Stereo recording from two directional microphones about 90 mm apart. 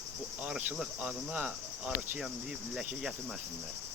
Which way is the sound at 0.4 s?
10° right (ahead or behind).